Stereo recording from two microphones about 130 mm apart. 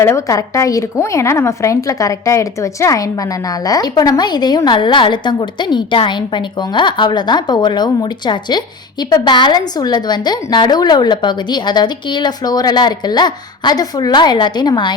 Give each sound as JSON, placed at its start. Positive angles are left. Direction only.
{"t": 0.0, "sound": "a woman's voice", "side_deg": 20}